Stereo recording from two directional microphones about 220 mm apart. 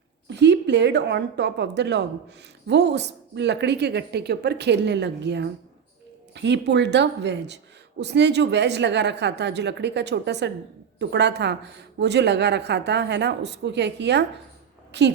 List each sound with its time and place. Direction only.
0.3 s a woman's voice: 50° right (ahead or behind)